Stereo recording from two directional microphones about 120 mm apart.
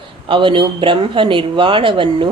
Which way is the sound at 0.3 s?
45° right (ahead or behind).